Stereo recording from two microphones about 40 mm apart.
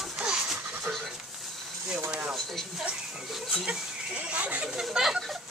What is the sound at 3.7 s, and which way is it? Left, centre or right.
Goat, right.